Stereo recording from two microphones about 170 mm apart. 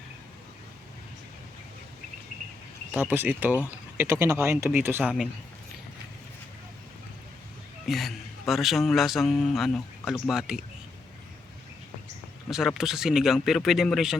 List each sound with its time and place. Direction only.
3.1 s speech: 10° right (ahead or behind)
7.9 s a man's voice: centre (ahead or behind)
12.5 s a man's voice: 5° right (ahead or behind)